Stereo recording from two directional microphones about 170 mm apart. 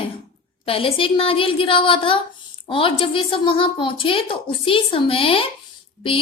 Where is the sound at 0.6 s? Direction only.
35° left (ahead or behind).